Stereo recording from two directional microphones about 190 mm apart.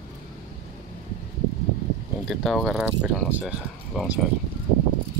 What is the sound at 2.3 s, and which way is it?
Speech, centre (ahead or behind).